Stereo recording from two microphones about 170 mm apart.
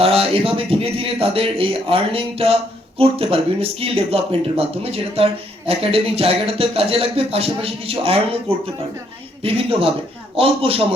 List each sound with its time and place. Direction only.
0.0 s speech: 35° right (ahead or behind)